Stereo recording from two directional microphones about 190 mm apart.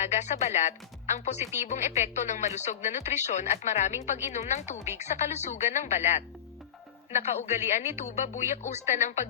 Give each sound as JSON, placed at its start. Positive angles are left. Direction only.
{"t": 0.0, "sound": "speech", "side_deg": 35}